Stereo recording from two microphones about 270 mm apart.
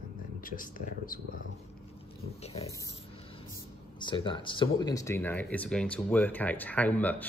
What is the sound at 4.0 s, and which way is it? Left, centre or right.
Speech, centre.